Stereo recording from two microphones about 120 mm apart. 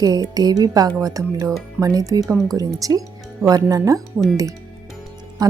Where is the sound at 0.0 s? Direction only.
35° right (ahead or behind).